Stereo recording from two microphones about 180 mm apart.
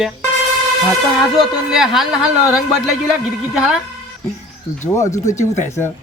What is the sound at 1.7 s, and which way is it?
Speech, centre (ahead or behind).